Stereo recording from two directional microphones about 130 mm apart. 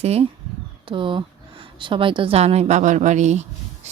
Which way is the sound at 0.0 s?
55° right (ahead or behind).